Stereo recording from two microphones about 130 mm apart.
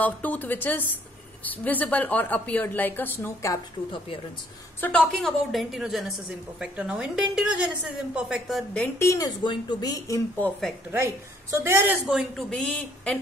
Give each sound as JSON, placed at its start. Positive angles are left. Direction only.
{"t": 0.0, "sound": "a woman's voice", "side_deg": 10}
{"t": 4.7, "sound": "a woman's voice", "side_deg": 15}
{"t": 5.0, "sound": "a woman's voice", "side_deg": 0}
{"t": 8.7, "sound": "a woman's voice", "side_deg": 15}
{"t": 9.4, "sound": "a woman's voice", "side_deg": 35}
{"t": 11.5, "sound": "a woman's voice", "side_deg": -20}
{"t": 12.4, "sound": "a woman's voice", "side_deg": 5}